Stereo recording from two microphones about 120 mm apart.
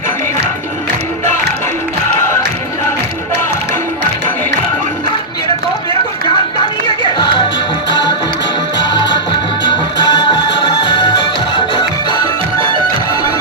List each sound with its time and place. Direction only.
9.6 s music: 40° left (ahead or behind)